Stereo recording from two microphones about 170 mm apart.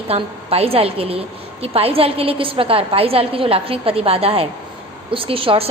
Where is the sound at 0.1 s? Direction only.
35° right (ahead or behind).